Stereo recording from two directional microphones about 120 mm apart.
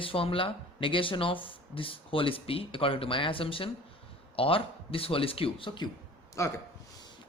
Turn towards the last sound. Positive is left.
turn(degrees=25)  # may be behind; listen again after turning